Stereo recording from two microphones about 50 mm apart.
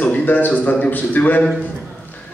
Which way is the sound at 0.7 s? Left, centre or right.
Left.